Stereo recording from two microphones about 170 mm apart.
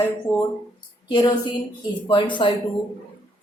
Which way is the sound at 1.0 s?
25° left (ahead or behind).